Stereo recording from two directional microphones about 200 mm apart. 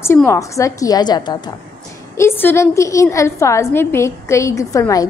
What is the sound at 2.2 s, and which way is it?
A woman's voice, 10° left (ahead or behind).